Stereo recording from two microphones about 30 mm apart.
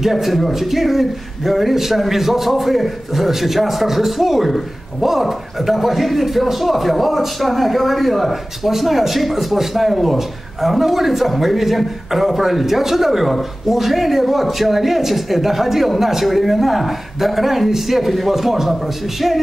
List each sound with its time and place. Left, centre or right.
0.0 s a man's voice: centre